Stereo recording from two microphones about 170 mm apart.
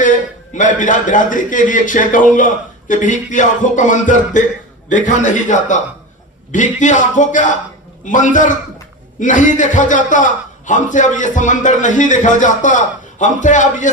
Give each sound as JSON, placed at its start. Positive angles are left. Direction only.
{"t": 0.5, "sound": "a man's voice", "side_deg": 50}